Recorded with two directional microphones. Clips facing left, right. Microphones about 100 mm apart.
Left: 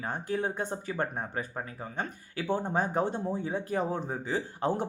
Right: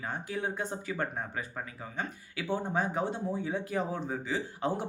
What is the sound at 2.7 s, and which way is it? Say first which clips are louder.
Speech: left 2 dB; 40° left (ahead or behind).